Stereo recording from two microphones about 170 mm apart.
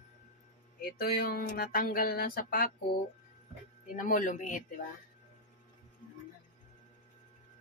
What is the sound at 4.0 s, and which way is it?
Speech, 50° left (ahead or behind).